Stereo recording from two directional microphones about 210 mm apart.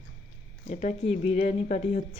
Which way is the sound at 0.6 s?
30° left (ahead or behind).